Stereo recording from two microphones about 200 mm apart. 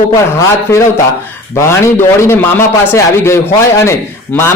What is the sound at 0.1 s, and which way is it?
A man's voice, 15° left (ahead or behind).